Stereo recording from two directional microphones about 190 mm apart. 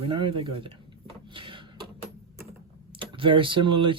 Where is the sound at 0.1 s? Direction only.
25° right (ahead or behind).